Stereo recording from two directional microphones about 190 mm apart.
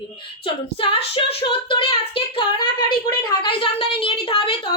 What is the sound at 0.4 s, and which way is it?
A woman's voice, 30° left (ahead or behind).